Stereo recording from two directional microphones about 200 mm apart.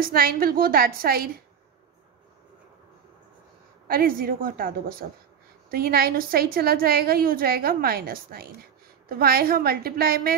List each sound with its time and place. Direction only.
0.0 s a woman's voice: 50° right (ahead or behind)
3.8 s a woman's voice: 45° right (ahead or behind)